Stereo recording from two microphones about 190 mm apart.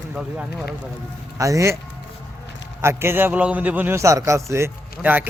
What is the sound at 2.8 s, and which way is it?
A man's voice, 10° right (ahead or behind).